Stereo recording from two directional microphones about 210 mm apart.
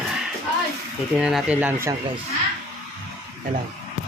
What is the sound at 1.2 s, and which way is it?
Speech, centre (ahead or behind).